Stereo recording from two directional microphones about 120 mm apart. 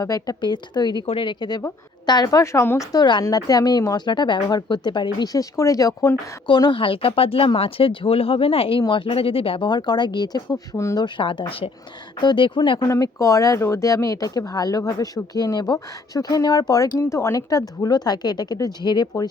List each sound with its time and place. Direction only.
0.0 s speech: 30° left (ahead or behind)
5.2 s speech: 30° left (ahead or behind)
6.5 s speech: 40° left (ahead or behind)
11.0 s speech: 45° left (ahead or behind)
12.9 s speech: 25° left (ahead or behind)